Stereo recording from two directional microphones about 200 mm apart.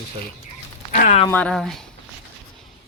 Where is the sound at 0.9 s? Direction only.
40° left (ahead or behind).